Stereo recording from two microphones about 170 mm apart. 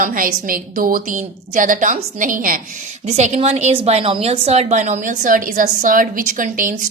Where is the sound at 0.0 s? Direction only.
55° right (ahead or behind).